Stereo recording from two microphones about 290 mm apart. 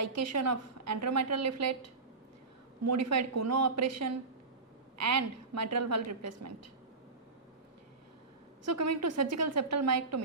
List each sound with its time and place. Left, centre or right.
0.0 s a woman's voice: right
8.6 s a woman's voice: right